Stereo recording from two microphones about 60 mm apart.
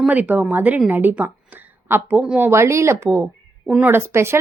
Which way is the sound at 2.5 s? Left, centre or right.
Right.